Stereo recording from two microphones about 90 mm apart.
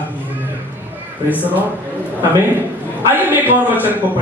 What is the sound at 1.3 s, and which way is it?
Speech, 20° left (ahead or behind).